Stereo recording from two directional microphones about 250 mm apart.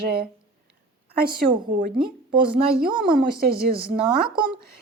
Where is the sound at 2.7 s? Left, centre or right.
Centre.